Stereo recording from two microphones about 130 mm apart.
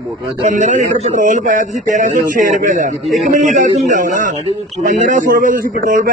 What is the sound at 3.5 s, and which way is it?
Speech, 75° right (ahead or behind).